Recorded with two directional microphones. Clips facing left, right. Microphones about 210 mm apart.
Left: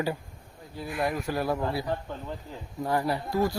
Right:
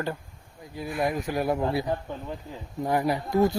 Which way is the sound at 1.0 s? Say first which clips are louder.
Right 2 dB; 15° right (ahead or behind).